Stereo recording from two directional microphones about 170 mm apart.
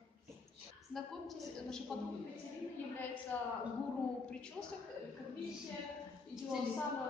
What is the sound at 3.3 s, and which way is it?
Speech, 10° left (ahead or behind).